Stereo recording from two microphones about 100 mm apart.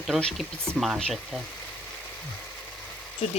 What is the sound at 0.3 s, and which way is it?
Speech, centre (ahead or behind).